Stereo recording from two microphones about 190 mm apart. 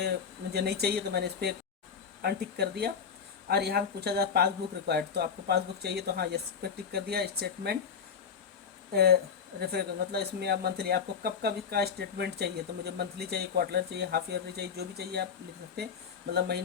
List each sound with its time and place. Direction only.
0.0 s speech: 60° right (ahead or behind)
8.9 s speech: 55° right (ahead or behind)
16.3 s speech: 60° right (ahead or behind)